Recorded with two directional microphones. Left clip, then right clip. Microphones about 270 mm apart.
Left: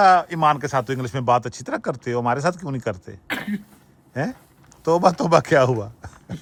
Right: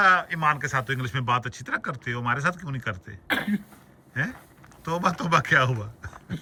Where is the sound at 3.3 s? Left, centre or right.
Centre.